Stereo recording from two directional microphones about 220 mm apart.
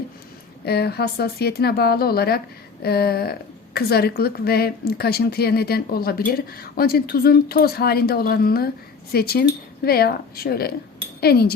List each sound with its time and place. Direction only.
0.6 s a woman's voice: 45° left (ahead or behind)